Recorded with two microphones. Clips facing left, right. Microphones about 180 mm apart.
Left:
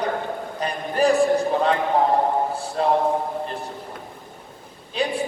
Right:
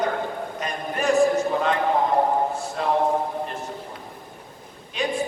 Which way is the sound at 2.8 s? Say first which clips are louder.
Left 4 dB; 35° left (ahead or behind).